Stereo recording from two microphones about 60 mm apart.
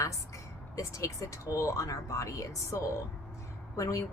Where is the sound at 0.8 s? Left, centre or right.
Left.